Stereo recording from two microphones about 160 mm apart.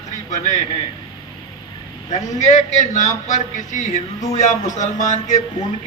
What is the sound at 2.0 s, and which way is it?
A man's voice, 50° left (ahead or behind).